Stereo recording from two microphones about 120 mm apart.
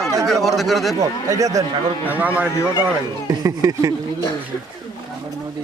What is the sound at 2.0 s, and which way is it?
Speech, 15° right (ahead or behind).